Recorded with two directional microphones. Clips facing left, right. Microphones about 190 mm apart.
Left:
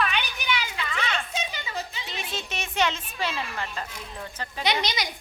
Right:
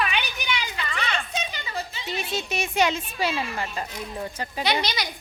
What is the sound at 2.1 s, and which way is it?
A woman's voice, 10° right (ahead or behind).